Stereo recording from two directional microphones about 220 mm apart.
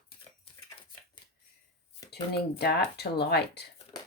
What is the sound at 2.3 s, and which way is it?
Speech, 50° left (ahead or behind).